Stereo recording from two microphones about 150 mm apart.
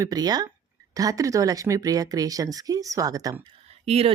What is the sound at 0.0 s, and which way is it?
Speech, 25° right (ahead or behind).